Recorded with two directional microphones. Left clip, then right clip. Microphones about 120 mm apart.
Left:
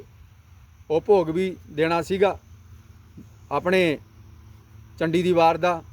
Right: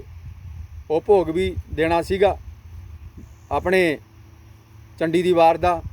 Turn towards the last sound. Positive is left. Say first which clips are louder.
# right 3 dB
turn(degrees=10)  # may be behind; listen again after turning